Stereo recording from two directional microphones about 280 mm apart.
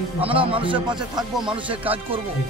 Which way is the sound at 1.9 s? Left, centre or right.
Centre.